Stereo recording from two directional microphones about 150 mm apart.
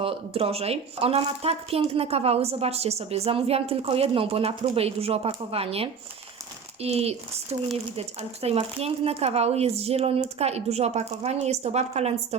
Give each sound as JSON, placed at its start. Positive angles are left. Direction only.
{"t": 0.0, "sound": "a woman's voice", "side_deg": -40}